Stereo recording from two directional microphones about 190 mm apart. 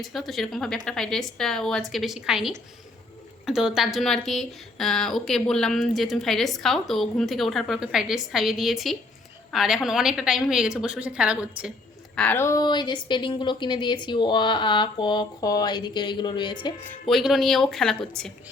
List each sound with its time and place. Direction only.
0.0 s speech: centre (ahead or behind)
12.1 s a woman's voice: 10° left (ahead or behind); by 16.7 s 25° left (ahead or behind)
17.1 s speech: centre (ahead or behind)